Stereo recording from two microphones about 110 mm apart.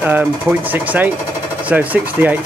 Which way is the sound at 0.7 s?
15° right (ahead or behind).